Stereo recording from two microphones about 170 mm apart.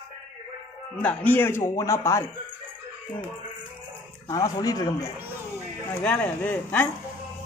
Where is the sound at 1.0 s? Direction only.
10° left (ahead or behind).